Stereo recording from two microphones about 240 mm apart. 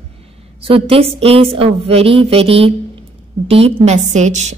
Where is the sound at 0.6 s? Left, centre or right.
Right.